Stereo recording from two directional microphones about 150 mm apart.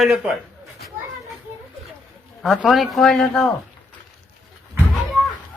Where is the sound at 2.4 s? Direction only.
Centre (ahead or behind).